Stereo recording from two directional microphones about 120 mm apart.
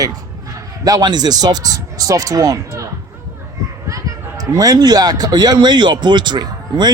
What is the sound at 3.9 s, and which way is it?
Speech, 30° right (ahead or behind).